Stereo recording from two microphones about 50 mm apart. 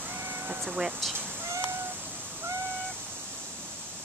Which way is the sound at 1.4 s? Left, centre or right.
Right.